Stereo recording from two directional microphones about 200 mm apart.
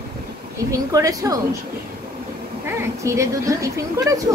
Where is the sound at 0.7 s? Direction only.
15° right (ahead or behind).